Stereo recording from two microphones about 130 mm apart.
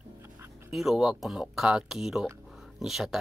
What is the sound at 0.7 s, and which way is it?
Speech, centre (ahead or behind).